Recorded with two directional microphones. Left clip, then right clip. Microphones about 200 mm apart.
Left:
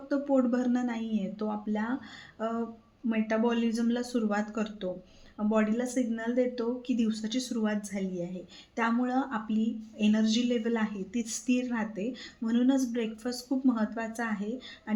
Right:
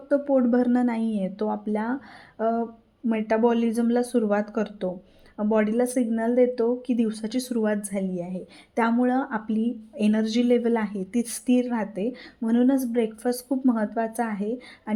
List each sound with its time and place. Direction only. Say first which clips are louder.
0.1 s a woman's voice: right 6 dB; 35° right (ahead or behind)